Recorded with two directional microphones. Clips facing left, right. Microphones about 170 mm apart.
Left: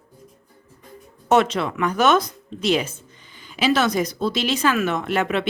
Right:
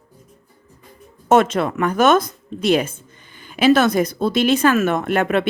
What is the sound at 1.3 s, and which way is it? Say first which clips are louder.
Speech: right 3 dB; 50° right (ahead or behind).